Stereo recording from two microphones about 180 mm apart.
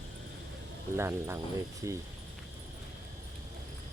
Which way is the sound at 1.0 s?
15° right (ahead or behind).